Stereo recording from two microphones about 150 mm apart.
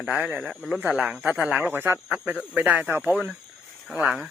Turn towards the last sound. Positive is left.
turn(degrees=-5)  # may be behind; listen again after turning